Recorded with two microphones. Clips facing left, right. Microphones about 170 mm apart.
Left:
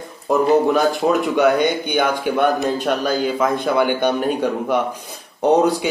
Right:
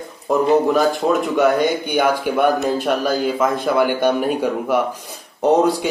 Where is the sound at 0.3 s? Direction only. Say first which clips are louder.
Even; centre (ahead or behind).